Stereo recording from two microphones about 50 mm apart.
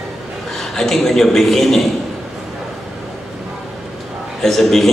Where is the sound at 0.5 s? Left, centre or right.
Centre.